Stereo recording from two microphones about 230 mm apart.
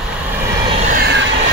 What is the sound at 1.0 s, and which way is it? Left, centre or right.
Vehicle, right.